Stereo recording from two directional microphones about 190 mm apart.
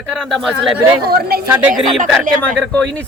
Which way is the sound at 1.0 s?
55° right (ahead or behind).